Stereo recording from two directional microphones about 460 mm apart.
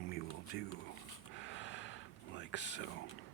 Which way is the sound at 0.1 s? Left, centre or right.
Centre.